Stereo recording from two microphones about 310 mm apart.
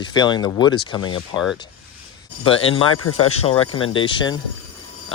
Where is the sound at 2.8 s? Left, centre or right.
Left.